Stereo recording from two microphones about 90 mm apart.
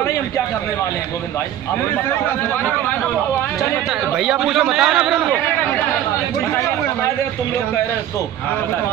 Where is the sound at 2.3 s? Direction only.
20° left (ahead or behind).